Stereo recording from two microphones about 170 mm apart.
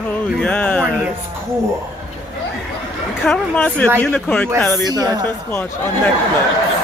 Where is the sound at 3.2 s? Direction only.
10° left (ahead or behind).